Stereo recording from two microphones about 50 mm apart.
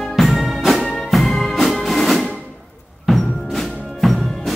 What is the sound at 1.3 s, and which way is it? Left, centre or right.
Music, centre.